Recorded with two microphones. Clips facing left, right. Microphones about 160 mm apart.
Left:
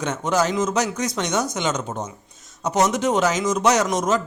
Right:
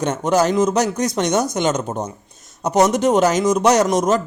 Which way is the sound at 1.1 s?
65° right (ahead or behind).